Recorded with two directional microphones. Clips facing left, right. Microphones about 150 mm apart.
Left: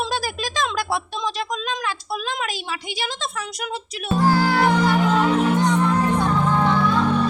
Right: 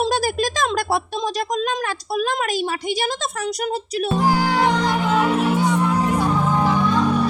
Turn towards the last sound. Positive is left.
turn(degrees=-10)  # may be behind; listen again after turning